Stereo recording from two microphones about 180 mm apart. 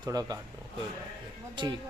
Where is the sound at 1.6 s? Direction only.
25° right (ahead or behind).